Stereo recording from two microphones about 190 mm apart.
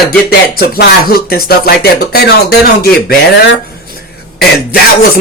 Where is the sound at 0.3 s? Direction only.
55° left (ahead or behind).